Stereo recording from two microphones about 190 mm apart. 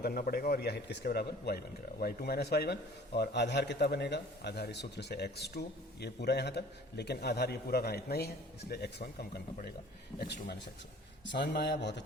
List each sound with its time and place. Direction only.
0.0 s a man's voice: 55° left (ahead or behind)